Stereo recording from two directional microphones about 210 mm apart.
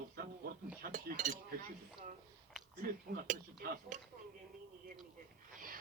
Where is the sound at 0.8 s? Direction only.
40° right (ahead or behind).